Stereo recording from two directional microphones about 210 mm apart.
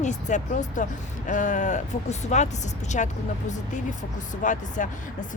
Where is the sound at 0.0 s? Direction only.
35° left (ahead or behind).